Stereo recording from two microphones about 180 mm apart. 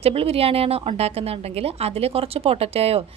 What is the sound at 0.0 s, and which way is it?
A woman's voice, 35° right (ahead or behind).